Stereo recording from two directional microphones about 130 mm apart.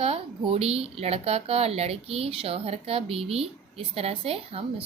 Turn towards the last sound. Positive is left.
turn(degrees=-50)  # may be behind; listen again after turning